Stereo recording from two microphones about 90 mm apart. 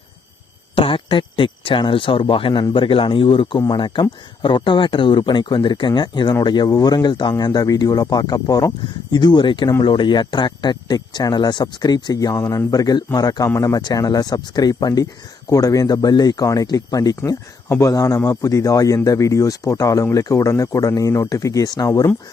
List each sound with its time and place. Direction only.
0.8 s speech: 80° left; by 8.7 s 45° left (ahead or behind)
9.1 s speech: 55° left (ahead or behind)